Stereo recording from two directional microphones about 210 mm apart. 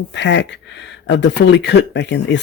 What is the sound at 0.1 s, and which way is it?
Speech, 60° left (ahead or behind).